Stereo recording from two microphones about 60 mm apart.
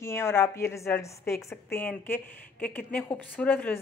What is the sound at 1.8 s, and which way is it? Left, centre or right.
A woman's voice, left.